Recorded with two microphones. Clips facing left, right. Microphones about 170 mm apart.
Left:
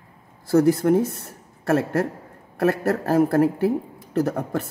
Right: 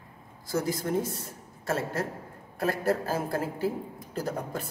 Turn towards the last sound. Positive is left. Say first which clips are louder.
# left 9 dB
turn(degrees=70)  # may be behind; listen again after turning